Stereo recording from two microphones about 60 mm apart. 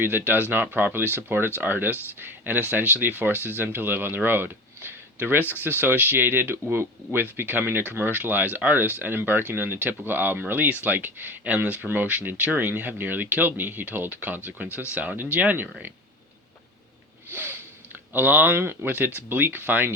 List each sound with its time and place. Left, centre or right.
0.0 s speech: right
17.3 s sniff: right
18.1 s speech: right